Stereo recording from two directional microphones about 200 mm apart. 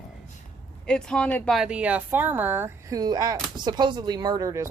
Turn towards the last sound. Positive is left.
turn(degrees=-15)  # may be behind; listen again after turning